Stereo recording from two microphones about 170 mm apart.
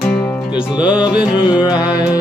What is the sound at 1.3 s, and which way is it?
Music, 25° left (ahead or behind).